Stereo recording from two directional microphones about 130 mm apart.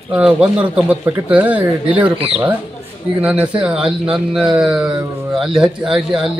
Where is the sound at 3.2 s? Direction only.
10° right (ahead or behind).